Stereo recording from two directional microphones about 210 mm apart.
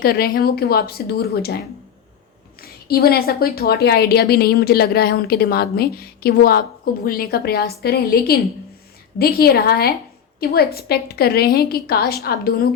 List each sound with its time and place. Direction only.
0.0 s a woman's voice: 45° left (ahead or behind)